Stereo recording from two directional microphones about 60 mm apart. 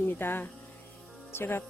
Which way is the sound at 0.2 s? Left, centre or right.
Left.